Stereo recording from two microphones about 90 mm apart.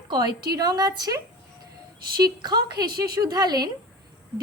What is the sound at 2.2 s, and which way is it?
A woman's voice, 50° right (ahead or behind).